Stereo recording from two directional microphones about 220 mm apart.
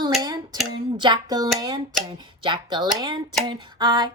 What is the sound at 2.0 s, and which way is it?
Speech, 20° right (ahead or behind).